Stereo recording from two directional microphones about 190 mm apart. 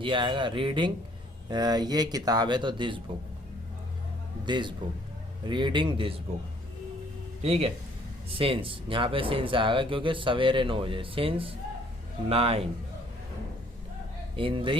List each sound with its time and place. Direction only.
0.0 s speech: 25° right (ahead or behind)
4.4 s speech: 25° right (ahead or behind)
7.4 s a man's voice: 30° right (ahead or behind)
14.3 s speech: 25° right (ahead or behind)